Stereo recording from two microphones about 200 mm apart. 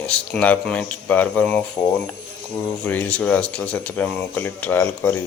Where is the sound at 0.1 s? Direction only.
5° left (ahead or behind).